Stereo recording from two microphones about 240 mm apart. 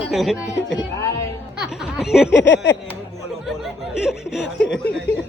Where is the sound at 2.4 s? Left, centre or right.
Left.